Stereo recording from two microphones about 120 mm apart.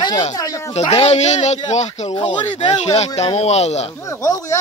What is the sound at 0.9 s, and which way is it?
Speech, 65° left (ahead or behind).